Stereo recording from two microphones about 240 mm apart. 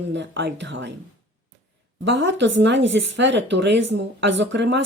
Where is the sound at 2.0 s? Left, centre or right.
Right.